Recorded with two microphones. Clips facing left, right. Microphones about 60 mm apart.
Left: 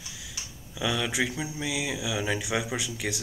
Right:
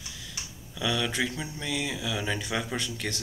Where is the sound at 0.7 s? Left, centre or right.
Centre.